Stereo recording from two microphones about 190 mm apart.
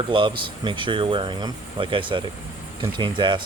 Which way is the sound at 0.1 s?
25° right (ahead or behind).